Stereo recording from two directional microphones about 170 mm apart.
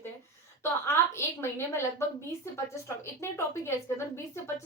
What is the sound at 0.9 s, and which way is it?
Speech, 15° left (ahead or behind).